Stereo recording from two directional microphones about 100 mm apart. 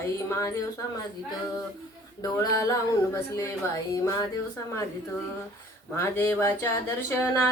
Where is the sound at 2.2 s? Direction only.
35° left (ahead or behind).